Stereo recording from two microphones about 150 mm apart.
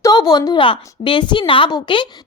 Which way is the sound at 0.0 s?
25° left (ahead or behind).